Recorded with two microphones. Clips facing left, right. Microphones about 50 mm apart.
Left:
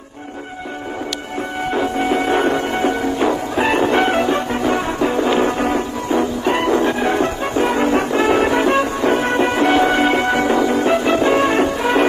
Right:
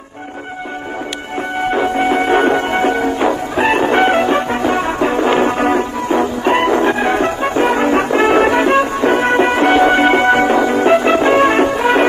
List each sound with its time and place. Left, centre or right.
1.7 s music: right
3.2 s music: centre
3.6 s music: right
10.7 s music: right
11.8 s music: right